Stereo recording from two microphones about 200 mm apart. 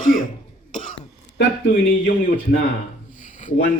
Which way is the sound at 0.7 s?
40° left (ahead or behind).